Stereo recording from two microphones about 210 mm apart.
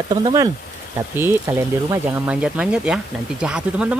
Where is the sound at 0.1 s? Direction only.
20° right (ahead or behind).